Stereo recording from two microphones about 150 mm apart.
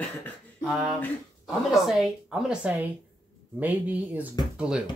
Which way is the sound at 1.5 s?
Centre (ahead or behind).